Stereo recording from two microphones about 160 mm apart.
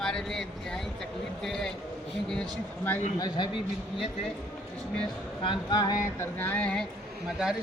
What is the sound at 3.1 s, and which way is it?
Speech, 25° left (ahead or behind).